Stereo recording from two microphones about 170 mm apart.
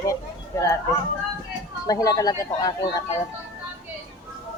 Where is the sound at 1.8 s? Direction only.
20° left (ahead or behind).